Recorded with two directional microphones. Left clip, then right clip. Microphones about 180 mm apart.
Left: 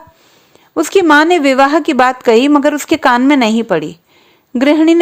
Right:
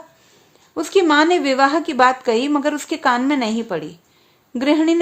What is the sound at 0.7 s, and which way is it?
A woman's voice, 45° left (ahead or behind).